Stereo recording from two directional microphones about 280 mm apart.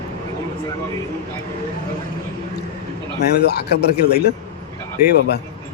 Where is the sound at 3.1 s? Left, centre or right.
Left.